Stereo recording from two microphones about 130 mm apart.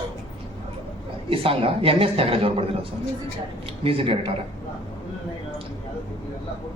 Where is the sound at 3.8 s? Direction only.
45° right (ahead or behind).